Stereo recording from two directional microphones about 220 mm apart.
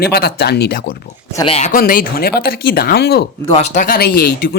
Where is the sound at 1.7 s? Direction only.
40° left (ahead or behind).